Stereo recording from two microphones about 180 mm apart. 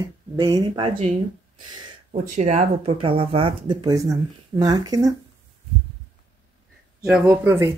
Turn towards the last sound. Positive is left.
turn(degrees=-15)  # may be behind; listen again after turning